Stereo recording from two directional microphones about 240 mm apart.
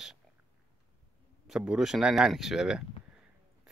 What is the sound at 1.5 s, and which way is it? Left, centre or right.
Speech, centre.